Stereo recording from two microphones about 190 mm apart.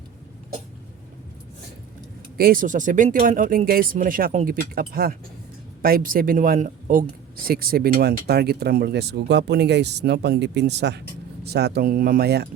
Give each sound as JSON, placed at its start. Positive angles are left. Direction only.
{"t": 2.4, "sound": "speech", "side_deg": -50}